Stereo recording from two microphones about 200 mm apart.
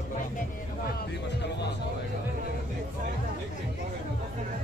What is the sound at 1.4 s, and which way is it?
Speech, 55° left (ahead or behind).